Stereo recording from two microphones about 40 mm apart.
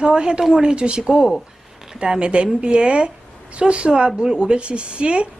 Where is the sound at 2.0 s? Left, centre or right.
Right.